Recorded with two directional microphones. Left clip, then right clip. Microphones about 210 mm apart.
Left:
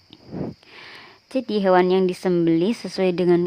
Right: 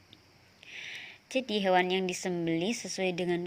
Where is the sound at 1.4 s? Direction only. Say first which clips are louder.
Left 10 dB; 35° left (ahead or behind).